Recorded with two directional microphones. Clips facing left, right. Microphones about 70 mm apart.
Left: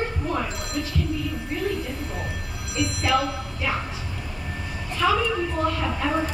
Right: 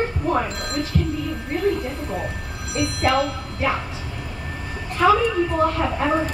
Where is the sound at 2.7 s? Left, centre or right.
Right.